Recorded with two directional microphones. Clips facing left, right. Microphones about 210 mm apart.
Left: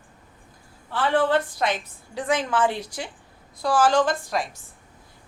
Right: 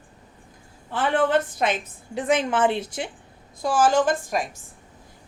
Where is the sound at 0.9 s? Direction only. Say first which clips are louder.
Even; 20° right (ahead or behind).